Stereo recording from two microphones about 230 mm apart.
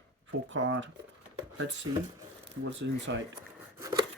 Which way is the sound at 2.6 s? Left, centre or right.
Right.